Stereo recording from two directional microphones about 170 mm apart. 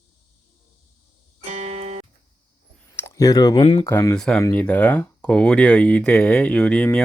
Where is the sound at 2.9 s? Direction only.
15° left (ahead or behind).